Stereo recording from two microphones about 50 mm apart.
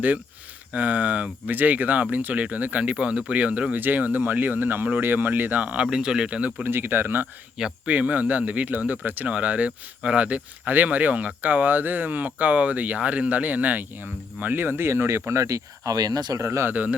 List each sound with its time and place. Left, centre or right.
0.7 s speech: right
5.8 s speech: centre
6.7 s speech: right
7.9 s speech: right
15.3 s speech: right